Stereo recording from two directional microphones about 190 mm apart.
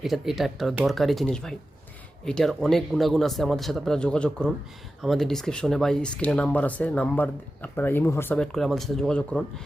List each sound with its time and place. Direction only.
0.0 s speech: centre (ahead or behind)